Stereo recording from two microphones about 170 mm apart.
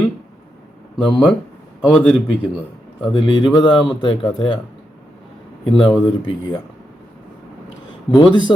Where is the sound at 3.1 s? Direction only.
25° left (ahead or behind).